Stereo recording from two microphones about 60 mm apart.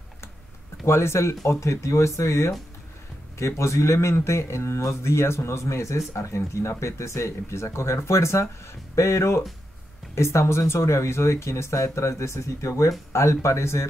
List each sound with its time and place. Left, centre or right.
0.8 s speech: left